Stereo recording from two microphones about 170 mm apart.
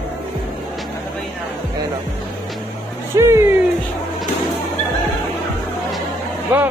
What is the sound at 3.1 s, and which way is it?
Speech, 15° right (ahead or behind).